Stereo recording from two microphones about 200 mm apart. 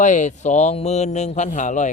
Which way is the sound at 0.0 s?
40° left (ahead or behind).